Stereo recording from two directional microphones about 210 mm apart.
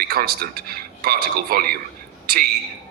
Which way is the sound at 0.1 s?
45° right (ahead or behind).